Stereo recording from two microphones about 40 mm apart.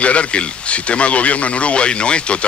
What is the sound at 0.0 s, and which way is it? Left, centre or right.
Speech, left.